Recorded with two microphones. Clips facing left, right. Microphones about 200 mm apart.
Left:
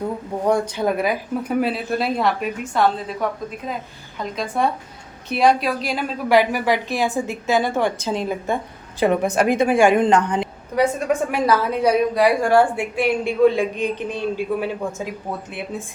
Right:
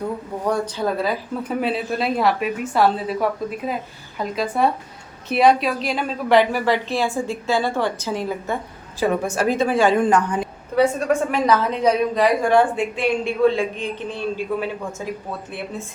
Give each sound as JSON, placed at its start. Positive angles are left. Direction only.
{"t": 0.4, "sound": "a woman's voice", "side_deg": 20}
{"t": 1.6, "sound": "a woman's voice", "side_deg": 0}
{"t": 11.3, "sound": "a woman's voice", "side_deg": 10}